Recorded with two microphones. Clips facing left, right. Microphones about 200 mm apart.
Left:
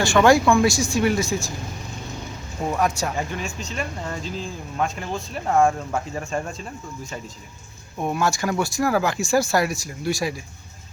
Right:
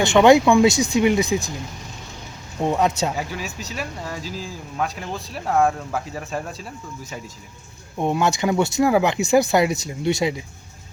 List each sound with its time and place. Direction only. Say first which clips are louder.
0.0 s speech: right 3 dB; 20° right (ahead or behind)
2.6 s speech: right 3 dB; 25° right (ahead or behind)
3.2 s speech: left 1 dB; 5° right (ahead or behind)
7.9 s speech: right 3 dB; 20° right (ahead or behind)